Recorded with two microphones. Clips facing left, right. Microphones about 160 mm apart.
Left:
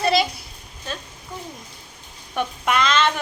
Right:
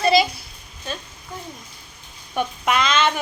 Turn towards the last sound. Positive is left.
turn(degrees=-5)  # may be behind; listen again after turning